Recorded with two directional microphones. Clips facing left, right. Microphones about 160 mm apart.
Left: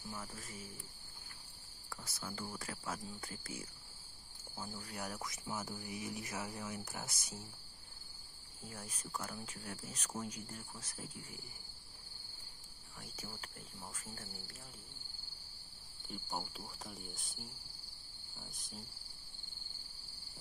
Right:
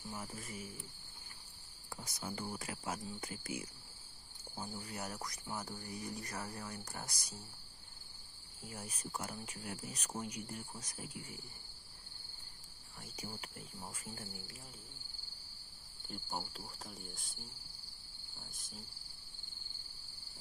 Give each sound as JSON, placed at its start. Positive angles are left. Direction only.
{"t": 0.0, "sound": "speech", "side_deg": -25}
{"t": 0.3, "sound": "speech", "side_deg": -10}
{"t": 1.9, "sound": "speech", "side_deg": -15}
{"t": 5.9, "sound": "speech", "side_deg": 20}
{"t": 6.3, "sound": "speech", "side_deg": 5}
{"t": 8.6, "sound": "speech", "side_deg": -10}
{"t": 13.1, "sound": "speech", "side_deg": -10}
{"t": 16.1, "sound": "speech", "side_deg": 0}
{"t": 18.5, "sound": "speech", "side_deg": 0}